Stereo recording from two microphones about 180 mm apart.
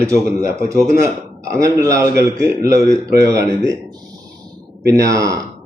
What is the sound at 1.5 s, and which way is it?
Speech, 15° right (ahead or behind).